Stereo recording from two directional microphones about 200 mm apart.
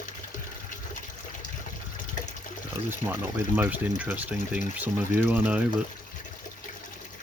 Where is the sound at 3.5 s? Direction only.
10° right (ahead or behind).